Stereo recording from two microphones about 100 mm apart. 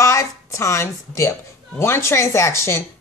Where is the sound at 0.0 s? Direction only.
30° left (ahead or behind).